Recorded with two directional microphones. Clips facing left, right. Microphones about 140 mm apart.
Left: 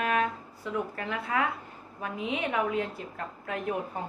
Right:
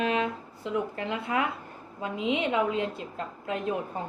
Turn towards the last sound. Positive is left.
turn(degrees=-20)  # may be behind; listen again after turning